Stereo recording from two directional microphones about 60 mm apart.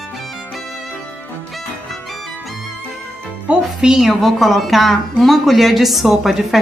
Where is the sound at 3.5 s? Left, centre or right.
Centre.